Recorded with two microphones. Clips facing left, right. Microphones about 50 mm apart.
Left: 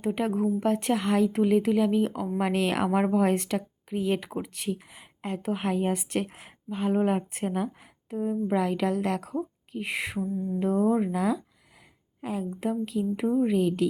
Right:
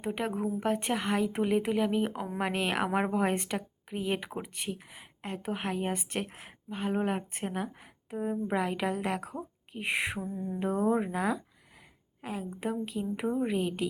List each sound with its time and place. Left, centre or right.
0.0 s speech: centre
1.3 s speech: centre
8.1 s speech: right
12.2 s speech: centre